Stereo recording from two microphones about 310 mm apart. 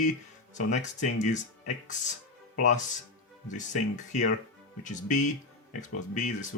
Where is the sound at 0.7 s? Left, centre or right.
Left.